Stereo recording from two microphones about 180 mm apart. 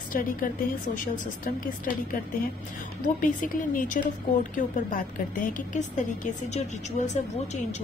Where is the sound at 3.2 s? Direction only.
50° left (ahead or behind).